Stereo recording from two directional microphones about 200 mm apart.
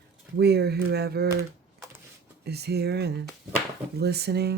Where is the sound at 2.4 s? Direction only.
55° right (ahead or behind).